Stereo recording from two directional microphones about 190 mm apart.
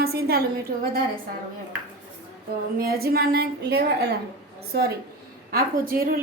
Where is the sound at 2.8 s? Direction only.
55° right (ahead or behind).